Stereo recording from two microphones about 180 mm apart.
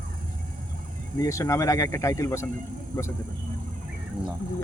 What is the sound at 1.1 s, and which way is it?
Speech, 15° left (ahead or behind).